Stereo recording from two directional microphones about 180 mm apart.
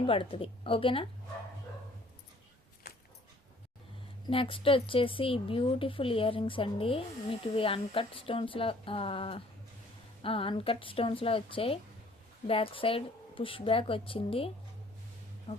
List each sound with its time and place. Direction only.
0.0 s speech: 30° left (ahead or behind)
4.3 s speech: 30° left (ahead or behind)